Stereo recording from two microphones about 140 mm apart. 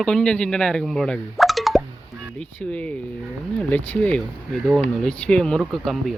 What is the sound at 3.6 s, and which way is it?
Speech, 10° left (ahead or behind).